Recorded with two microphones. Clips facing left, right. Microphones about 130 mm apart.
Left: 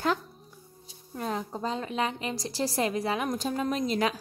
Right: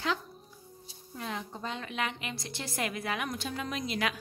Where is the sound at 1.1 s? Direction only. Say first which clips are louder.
Left 6 dB; 40° left (ahead or behind).